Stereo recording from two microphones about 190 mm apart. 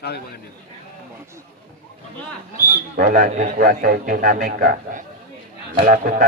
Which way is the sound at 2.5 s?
45° right (ahead or behind).